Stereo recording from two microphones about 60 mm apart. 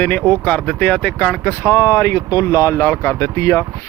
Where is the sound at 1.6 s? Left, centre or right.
Left.